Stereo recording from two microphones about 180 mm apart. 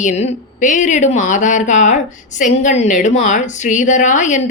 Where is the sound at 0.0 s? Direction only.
40° left (ahead or behind).